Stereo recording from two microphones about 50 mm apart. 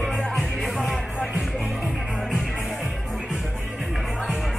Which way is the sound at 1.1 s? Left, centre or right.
Right.